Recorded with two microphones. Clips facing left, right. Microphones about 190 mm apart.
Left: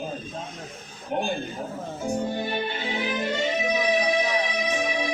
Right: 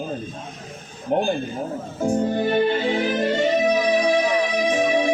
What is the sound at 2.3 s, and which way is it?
Music, 45° right (ahead or behind).